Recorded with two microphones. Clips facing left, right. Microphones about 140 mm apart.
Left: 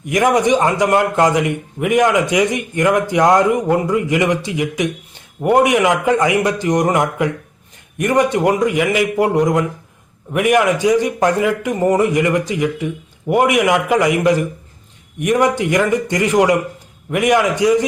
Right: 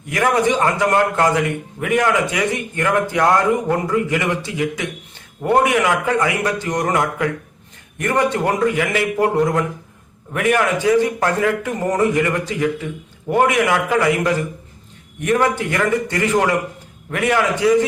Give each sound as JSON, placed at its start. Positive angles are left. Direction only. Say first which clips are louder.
{"t": 0.0, "sound": "a man's voice", "louder": "left 3 dB", "side_deg": 20}